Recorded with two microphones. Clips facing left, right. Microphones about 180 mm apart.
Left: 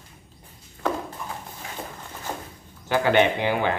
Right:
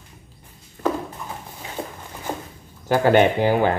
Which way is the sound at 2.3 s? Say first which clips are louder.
Right 4 dB; 10° right (ahead or behind).